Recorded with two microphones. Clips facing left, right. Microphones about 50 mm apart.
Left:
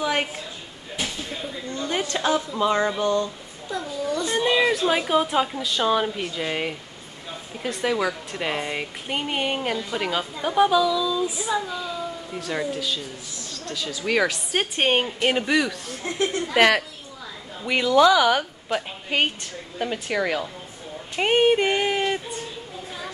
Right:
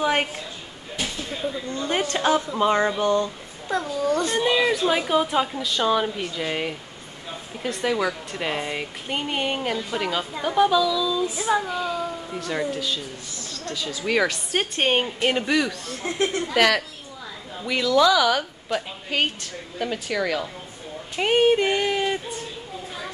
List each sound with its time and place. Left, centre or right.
0.0 s a sound: right
0.9 s a sound: centre
1.7 s a sound: right
2.2 s a woman's voice: right
3.8 s a child's voice: right
4.4 s a woman's voice: centre
11.4 s a child's voice: right
12.3 s a woman's voice: centre
16.5 s speech: centre